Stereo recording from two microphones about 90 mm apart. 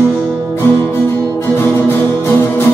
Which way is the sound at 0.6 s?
25° left (ahead or behind).